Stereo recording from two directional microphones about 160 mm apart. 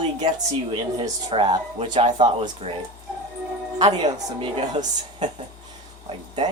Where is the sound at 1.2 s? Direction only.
40° right (ahead or behind).